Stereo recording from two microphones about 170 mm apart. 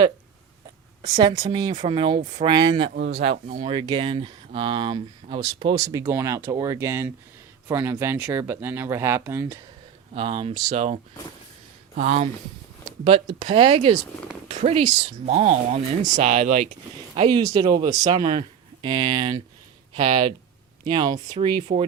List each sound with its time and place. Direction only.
1.2 s speech: 25° right (ahead or behind)
5.7 s speech: 15° right (ahead or behind)
10.2 s speech: 30° right (ahead or behind)
17.2 s speech: 25° right (ahead or behind)